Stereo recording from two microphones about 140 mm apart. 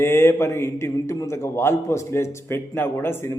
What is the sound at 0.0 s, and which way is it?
A man's voice, 20° left (ahead or behind).